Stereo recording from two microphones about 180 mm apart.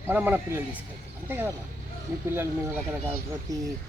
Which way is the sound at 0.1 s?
10° right (ahead or behind).